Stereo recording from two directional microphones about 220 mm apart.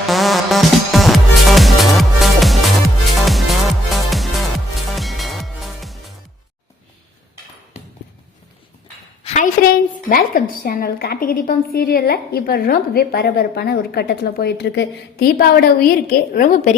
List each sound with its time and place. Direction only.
0.1 s music: centre (ahead or behind)
9.2 s a woman's voice: 35° left (ahead or behind)